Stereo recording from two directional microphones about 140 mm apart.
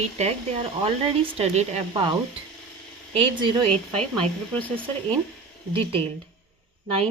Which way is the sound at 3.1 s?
35° right (ahead or behind).